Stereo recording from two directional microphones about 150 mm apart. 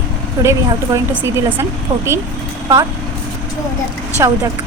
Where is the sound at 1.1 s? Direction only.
10° right (ahead or behind).